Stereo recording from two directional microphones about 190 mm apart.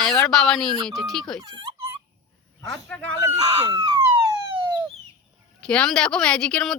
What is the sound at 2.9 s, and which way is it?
Speech, 5° left (ahead or behind).